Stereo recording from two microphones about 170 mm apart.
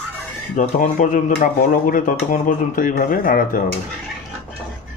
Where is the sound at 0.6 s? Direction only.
50° left (ahead or behind).